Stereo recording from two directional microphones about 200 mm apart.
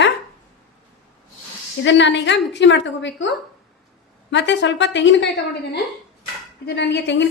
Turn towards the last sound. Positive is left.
turn(degrees=60)  # may be behind; listen again after turning